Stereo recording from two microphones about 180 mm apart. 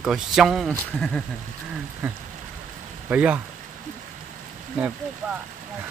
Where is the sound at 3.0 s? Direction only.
5° right (ahead or behind).